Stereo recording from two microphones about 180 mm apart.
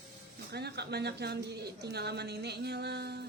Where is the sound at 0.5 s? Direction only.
65° right (ahead or behind).